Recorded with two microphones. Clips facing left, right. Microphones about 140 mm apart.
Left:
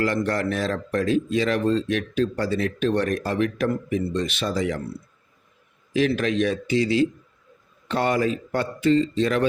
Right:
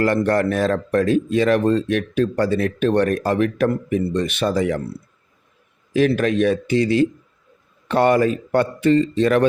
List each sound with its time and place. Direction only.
0.0 s speech: 55° right (ahead or behind)
5.9 s a man's voice: 50° right (ahead or behind)